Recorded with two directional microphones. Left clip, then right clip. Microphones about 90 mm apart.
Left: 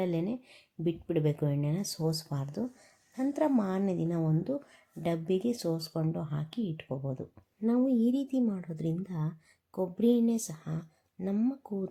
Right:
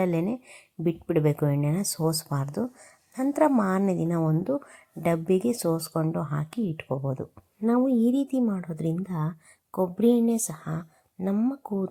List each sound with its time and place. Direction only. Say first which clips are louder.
0.0 s a woman's voice: right 6 dB; 30° right (ahead or behind)
6.8 s speech: right 7 dB; 75° right (ahead or behind)
7.6 s a woman's voice: right 5 dB; 30° right (ahead or behind)